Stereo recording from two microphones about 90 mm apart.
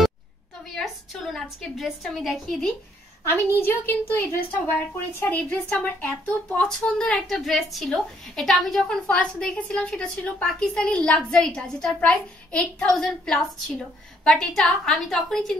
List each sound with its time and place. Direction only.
0.7 s a woman's voice: centre (ahead or behind)
3.3 s a woman's voice: 25° left (ahead or behind); by 15.5 s 5° left (ahead or behind)